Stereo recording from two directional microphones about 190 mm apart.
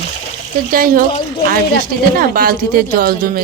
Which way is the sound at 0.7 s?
50° right (ahead or behind).